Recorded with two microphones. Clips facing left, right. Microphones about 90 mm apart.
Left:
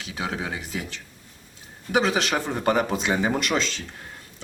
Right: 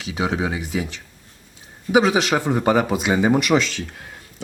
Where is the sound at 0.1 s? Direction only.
20° right (ahead or behind).